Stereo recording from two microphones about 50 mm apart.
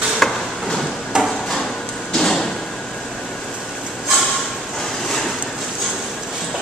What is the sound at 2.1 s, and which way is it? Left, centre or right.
Sliding door, centre.